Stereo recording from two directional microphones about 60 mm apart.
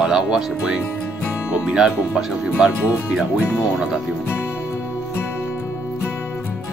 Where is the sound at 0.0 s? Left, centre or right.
Centre.